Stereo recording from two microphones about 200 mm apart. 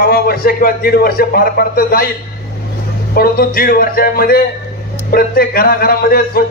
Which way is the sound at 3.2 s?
50° left (ahead or behind).